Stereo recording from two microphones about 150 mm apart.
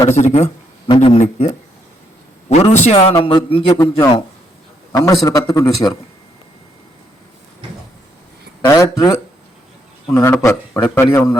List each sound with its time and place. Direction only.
0.2 s speech: 45° left (ahead or behind)
0.9 s a man's voice: 35° left (ahead or behind)
1.2 s speech: 55° left (ahead or behind)
2.5 s a man's voice: 40° left (ahead or behind)
4.9 s a man's voice: 25° left (ahead or behind)
8.6 s a man's voice: 20° left (ahead or behind)